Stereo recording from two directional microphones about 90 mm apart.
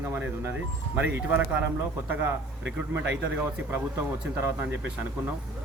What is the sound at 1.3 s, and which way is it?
Speech, 20° right (ahead or behind).